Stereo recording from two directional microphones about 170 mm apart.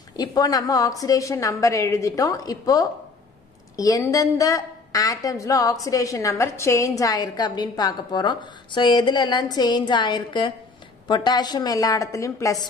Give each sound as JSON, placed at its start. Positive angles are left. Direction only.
{"t": 0.1, "sound": "a woman's voice", "side_deg": 20}